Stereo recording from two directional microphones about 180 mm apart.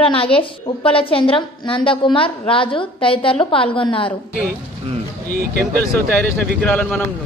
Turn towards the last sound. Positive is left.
turn(degrees=5)  # may be behind; listen again after turning